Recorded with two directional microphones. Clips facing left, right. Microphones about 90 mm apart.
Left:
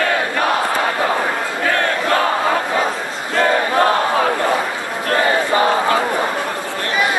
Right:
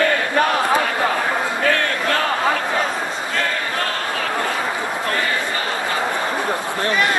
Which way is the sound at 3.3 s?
30° left (ahead or behind).